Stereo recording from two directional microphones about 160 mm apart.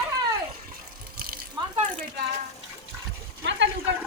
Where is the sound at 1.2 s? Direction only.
65° right (ahead or behind).